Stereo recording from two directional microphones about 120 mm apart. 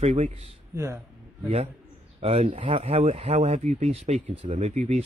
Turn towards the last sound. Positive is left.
turn(degrees=-70)  # may be behind; listen again after turning